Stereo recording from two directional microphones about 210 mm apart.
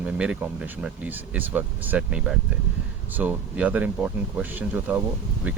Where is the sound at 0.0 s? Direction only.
5° right (ahead or behind).